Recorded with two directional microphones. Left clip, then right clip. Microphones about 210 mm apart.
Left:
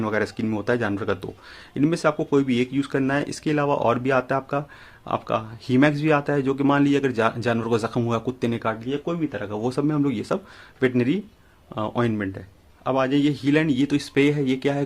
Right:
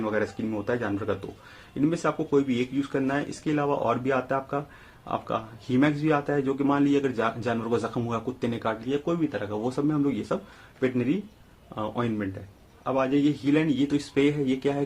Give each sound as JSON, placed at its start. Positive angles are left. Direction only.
{"t": 0.0, "sound": "speech", "side_deg": 40}